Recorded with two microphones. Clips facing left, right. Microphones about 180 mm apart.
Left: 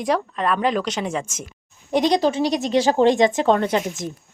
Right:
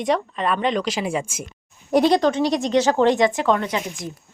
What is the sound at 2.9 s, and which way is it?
Speech, 15° left (ahead or behind).